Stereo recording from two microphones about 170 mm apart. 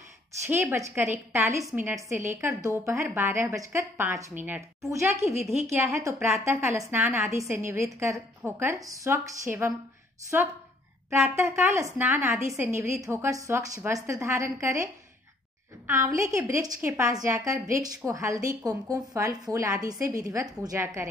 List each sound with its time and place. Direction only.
0.5 s a woman's voice: 15° right (ahead or behind)
15.9 s a woman's voice: 15° right (ahead or behind)